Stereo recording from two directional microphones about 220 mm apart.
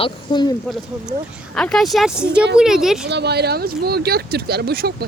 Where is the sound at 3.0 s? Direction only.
50° right (ahead or behind).